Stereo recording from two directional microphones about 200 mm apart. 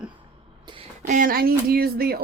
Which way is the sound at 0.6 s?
30° right (ahead or behind).